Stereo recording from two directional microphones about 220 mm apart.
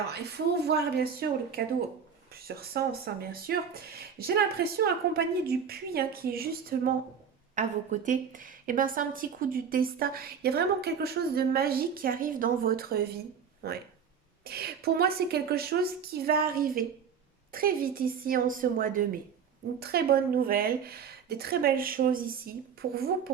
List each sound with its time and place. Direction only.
0.1 s a woman's voice: 45° right (ahead or behind)